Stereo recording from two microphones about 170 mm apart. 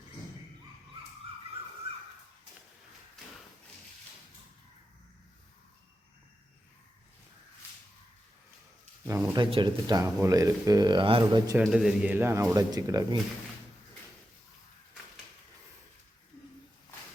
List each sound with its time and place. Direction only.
9.0 s speech: 15° right (ahead or behind)
9.4 s speech: 30° right (ahead or behind)
10.0 s speech: 15° right (ahead or behind)
11.6 s speech: 5° right (ahead or behind); by 13.1 s 20° right (ahead or behind)